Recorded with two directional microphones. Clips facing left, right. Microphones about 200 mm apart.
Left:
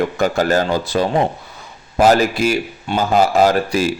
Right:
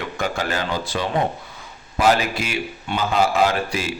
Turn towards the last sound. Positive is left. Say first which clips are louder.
# left 6 dB
turn(degrees=40)  # may be behind; listen again after turning